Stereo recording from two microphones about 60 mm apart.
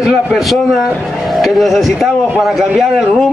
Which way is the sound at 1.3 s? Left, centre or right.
Centre.